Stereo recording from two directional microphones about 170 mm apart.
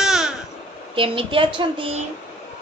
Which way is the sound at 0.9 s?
30° right (ahead or behind).